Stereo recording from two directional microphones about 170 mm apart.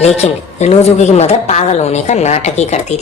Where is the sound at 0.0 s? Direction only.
40° left (ahead or behind).